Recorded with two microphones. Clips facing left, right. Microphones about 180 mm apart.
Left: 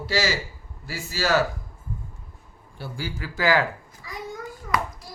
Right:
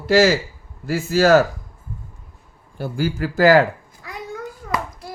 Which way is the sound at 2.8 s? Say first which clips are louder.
Right 10 dB; 45° right (ahead or behind).